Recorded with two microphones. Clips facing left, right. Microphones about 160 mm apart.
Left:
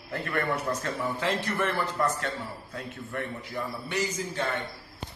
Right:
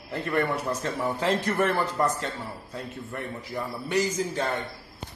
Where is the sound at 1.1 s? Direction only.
40° right (ahead or behind).